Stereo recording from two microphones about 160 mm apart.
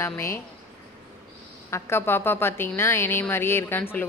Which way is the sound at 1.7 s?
15° left (ahead or behind).